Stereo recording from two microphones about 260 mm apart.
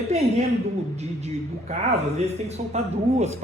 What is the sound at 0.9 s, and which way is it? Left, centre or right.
A woman's voice, right.